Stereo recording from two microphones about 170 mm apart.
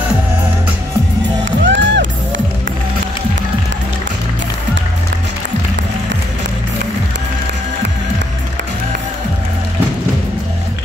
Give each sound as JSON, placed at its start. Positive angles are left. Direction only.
{"t": 1.4, "sound": "music", "side_deg": -90}